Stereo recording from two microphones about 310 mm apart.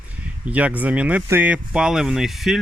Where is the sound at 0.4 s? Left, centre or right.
Centre.